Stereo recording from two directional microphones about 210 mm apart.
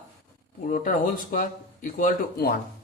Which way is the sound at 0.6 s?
40° left (ahead or behind).